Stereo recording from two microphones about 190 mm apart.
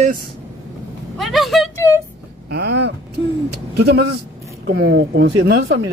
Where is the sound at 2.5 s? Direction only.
60° right (ahead or behind).